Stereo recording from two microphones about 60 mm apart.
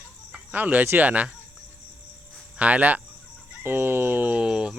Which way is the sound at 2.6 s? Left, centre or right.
Right.